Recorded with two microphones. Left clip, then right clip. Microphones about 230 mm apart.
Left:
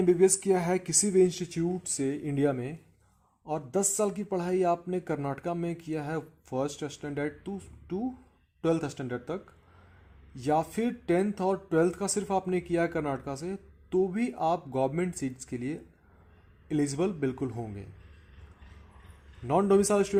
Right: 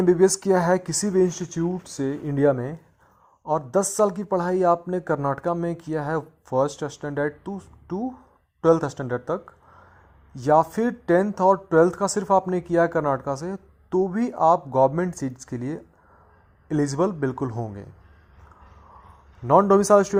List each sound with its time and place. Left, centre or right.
0.0 s speech: right
19.5 s speech: right